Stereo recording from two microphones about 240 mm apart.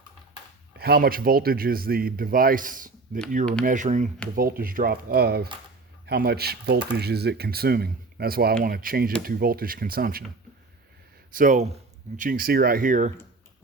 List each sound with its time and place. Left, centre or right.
0.8 s speech: right
11.3 s speech: right